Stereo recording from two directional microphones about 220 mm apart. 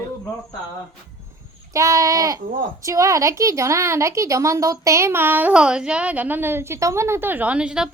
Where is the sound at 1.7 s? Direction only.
15° right (ahead or behind).